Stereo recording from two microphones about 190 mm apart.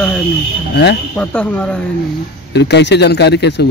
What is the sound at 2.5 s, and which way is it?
A man's voice, 65° left (ahead or behind).